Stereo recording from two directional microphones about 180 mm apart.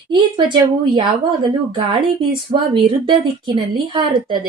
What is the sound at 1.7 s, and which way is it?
Speech, 25° right (ahead or behind).